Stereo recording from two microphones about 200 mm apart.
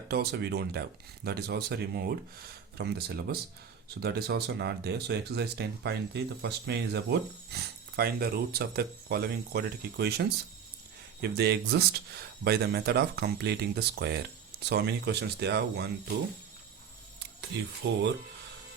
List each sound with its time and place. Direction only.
0.1 s speech: 50° right (ahead or behind)
17.5 s speech: 60° right (ahead or behind)